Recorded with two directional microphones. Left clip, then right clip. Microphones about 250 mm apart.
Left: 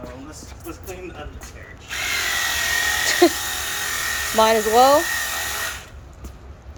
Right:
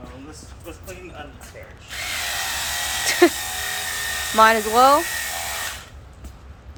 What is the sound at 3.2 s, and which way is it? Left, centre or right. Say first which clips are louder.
Speech: right 1 dB; centre.